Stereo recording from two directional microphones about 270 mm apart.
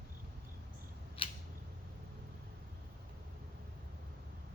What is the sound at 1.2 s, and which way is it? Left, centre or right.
Scissors, centre.